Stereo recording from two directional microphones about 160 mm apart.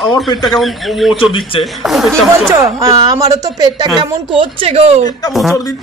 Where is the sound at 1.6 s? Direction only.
Centre (ahead or behind).